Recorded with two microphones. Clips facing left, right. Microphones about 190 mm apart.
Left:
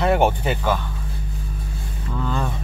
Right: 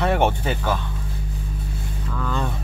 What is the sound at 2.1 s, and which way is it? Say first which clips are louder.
Vehicle: left 2 dB; 25° left (ahead or behind).